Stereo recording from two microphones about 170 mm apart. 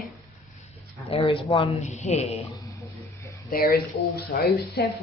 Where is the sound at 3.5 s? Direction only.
60° left (ahead or behind).